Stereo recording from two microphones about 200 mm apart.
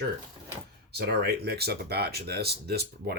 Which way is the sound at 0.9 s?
55° right (ahead or behind).